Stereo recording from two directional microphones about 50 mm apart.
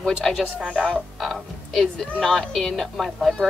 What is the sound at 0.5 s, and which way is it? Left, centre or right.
Speech, right.